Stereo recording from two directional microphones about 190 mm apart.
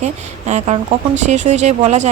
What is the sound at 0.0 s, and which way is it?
Speech, 35° right (ahead or behind).